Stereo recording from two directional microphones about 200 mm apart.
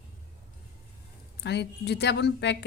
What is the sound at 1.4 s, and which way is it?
A woman's voice, 55° left (ahead or behind).